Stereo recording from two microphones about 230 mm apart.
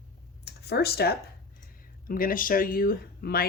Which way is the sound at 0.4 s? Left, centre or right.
Left.